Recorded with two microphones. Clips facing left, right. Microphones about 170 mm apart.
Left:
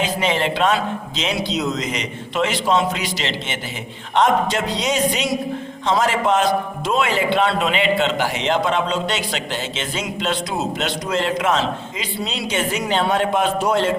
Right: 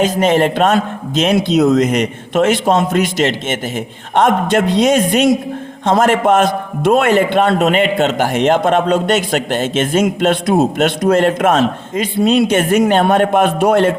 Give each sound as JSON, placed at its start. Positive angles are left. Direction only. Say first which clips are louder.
{"t": 0.0, "sound": "a man's voice", "louder": "right 8 dB", "side_deg": -45}